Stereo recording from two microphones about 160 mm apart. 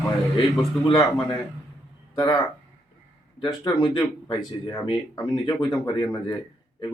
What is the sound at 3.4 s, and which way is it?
Speech, 25° left (ahead or behind).